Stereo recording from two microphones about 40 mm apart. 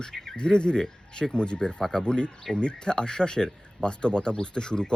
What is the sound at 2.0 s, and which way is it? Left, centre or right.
Speech, left.